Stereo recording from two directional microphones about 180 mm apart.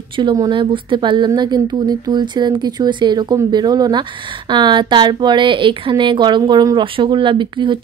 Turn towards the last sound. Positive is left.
turn(degrees=-25)  # may be behind; listen again after turning